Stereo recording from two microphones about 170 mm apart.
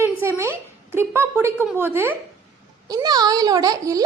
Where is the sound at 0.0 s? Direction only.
15° right (ahead or behind).